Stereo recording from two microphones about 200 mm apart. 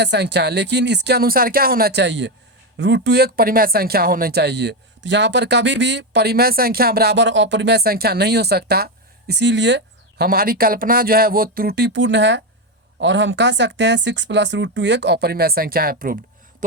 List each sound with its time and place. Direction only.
0.0 s speech: 60° right (ahead or behind)